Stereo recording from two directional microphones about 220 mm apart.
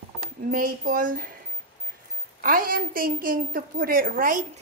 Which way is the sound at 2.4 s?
40° right (ahead or behind).